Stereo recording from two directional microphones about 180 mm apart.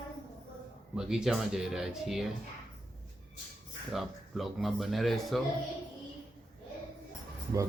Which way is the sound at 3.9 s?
Centre (ahead or behind).